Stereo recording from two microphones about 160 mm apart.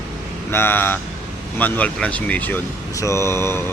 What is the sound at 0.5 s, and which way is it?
Speech, 15° left (ahead or behind).